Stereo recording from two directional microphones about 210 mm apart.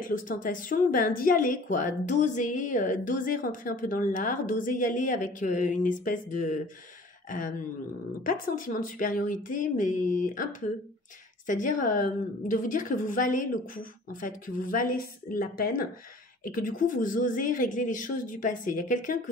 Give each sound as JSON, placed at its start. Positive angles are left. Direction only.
{"t": 0.3, "sound": "a woman's voice", "side_deg": 40}